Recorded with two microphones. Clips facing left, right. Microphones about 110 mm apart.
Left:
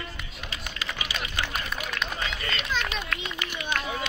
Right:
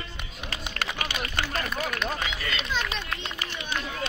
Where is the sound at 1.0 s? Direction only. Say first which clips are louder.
Left 1 dB; 60° right (ahead or behind).